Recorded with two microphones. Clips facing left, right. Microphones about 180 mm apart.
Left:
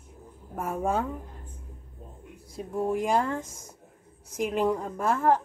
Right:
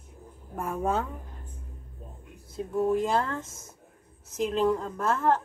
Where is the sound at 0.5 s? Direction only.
10° left (ahead or behind).